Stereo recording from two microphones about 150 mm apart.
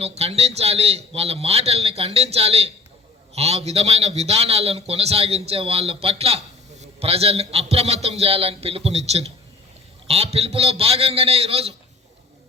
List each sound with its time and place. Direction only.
0.0 s a man's voice: 45° right (ahead or behind)